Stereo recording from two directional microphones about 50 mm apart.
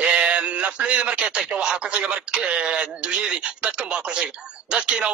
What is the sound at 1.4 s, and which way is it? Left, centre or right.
A man's voice, centre.